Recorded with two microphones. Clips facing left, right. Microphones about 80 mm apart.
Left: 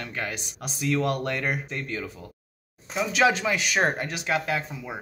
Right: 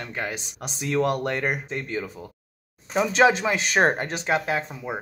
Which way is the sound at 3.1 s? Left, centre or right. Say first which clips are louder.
Right 2 dB; right.